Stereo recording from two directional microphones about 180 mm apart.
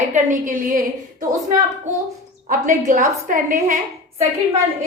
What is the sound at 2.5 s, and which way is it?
A woman's voice, 45° right (ahead or behind).